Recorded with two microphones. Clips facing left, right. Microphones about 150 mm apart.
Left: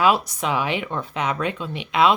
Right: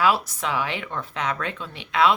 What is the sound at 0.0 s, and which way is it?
Speech, 20° left (ahead or behind).